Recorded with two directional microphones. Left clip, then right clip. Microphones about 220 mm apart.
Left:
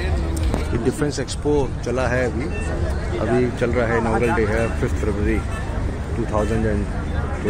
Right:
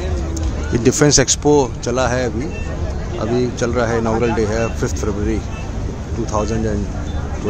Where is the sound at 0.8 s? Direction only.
50° right (ahead or behind).